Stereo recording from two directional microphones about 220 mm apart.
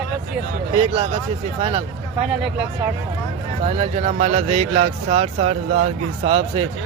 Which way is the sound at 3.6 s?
30° right (ahead or behind).